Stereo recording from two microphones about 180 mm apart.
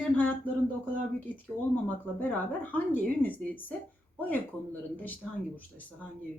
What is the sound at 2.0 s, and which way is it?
A woman's voice, 10° left (ahead or behind).